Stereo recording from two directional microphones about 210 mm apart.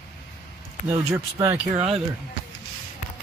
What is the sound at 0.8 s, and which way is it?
Speech, 10° right (ahead or behind).